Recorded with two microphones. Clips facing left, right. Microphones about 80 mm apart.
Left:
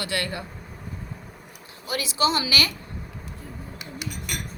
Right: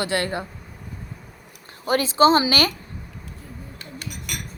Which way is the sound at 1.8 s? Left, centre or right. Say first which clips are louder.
Right 8 dB; right.